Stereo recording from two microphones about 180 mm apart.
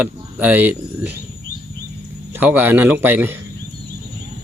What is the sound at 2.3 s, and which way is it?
Speech, 10° right (ahead or behind).